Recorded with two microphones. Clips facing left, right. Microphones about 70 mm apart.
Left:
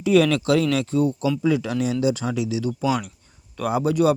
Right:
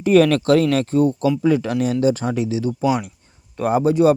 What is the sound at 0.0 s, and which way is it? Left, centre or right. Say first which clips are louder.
Speech: right 4 dB; right.